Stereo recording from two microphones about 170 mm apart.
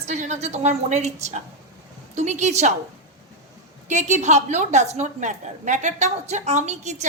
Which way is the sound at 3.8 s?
45° right (ahead or behind).